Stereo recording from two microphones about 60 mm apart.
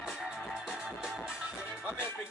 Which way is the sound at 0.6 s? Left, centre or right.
Centre.